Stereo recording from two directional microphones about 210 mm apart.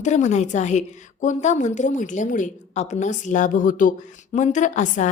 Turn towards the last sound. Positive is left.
turn(degrees=35)  # may be behind; listen again after turning